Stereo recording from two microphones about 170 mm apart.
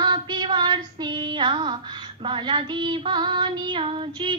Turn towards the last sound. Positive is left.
turn(degrees=-30)  # may be behind; listen again after turning